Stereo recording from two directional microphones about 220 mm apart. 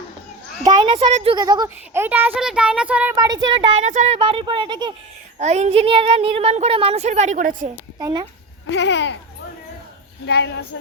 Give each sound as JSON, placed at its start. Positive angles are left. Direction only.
{"t": 0.6, "sound": "a child's voice", "side_deg": -20}
{"t": 3.8, "sound": "a woman's voice", "side_deg": -30}
{"t": 5.4, "sound": "a woman's voice", "side_deg": -30}
{"t": 7.9, "sound": "speech", "side_deg": -20}
{"t": 8.7, "sound": "speech", "side_deg": 55}
{"t": 10.2, "sound": "speech", "side_deg": 50}